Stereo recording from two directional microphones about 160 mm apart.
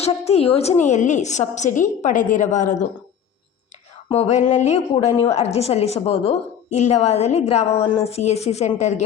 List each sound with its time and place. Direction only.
0.0 s a woman's voice: 40° left (ahead or behind)
4.1 s a woman's voice: 45° left (ahead or behind)